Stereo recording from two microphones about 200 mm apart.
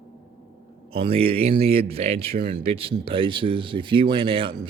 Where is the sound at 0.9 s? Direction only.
30° right (ahead or behind).